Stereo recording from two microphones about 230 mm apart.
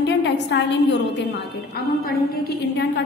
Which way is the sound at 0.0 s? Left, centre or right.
Left.